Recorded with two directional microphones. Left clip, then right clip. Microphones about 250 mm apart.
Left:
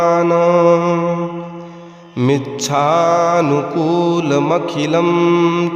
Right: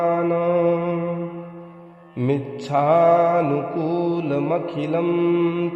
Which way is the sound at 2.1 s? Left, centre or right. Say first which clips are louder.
Left 7 dB; left.